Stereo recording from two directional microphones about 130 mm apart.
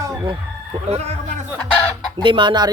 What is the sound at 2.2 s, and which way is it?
Chicken, 35° right (ahead or behind).